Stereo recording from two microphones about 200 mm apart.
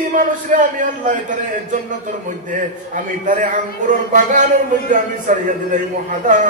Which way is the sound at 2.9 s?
40° right (ahead or behind).